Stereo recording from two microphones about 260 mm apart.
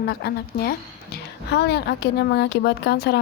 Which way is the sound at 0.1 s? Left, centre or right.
Left.